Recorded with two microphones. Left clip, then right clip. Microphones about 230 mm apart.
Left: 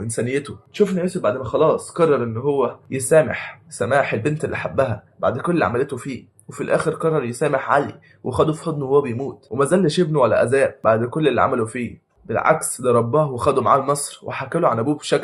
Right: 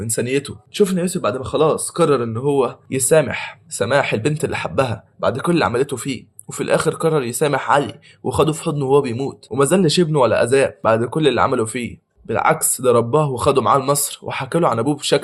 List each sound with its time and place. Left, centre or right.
0.0 s speech: right